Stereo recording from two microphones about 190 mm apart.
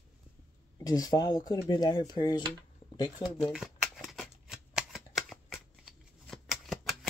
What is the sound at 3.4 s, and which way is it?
Shuffling cards, centre (ahead or behind).